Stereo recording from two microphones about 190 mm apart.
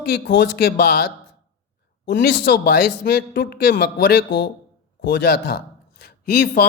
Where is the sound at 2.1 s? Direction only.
60° left (ahead or behind).